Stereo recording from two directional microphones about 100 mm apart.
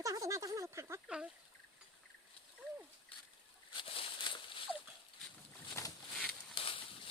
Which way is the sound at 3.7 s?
65° left (ahead or behind).